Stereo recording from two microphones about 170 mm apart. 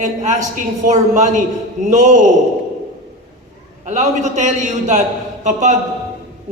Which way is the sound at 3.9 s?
45° right (ahead or behind).